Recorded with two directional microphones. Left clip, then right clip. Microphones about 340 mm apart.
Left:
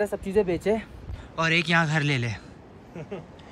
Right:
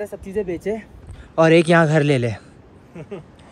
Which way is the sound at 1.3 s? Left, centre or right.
Centre.